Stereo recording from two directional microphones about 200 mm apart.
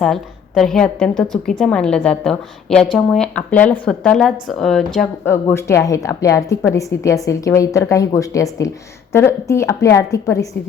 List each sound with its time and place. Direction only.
0.0 s a woman's voice: centre (ahead or behind)
5.3 s a woman's voice: 15° left (ahead or behind)